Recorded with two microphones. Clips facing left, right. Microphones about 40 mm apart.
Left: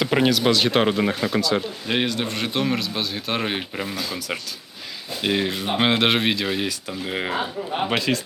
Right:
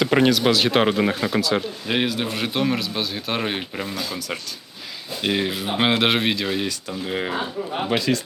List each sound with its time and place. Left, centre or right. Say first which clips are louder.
0.0 s speech: right 2 dB; centre